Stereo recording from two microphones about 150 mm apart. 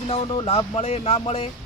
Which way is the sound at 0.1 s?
35° left (ahead or behind).